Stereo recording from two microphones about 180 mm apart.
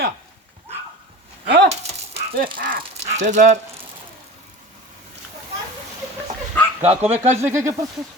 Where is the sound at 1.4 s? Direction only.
65° right (ahead or behind).